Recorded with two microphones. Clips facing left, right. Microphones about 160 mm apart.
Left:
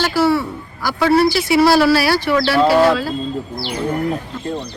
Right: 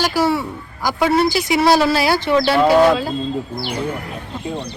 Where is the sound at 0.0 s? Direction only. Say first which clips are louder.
Left 2 dB; 15° right (ahead or behind).